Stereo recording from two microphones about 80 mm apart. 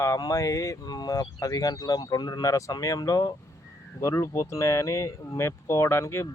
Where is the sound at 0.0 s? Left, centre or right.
Left.